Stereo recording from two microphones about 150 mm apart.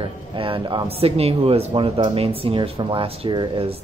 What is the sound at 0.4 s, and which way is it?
Speech, 35° right (ahead or behind).